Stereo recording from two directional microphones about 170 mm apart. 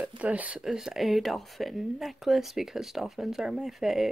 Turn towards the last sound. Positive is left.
turn(degrees=0)  # may be behind; listen again after turning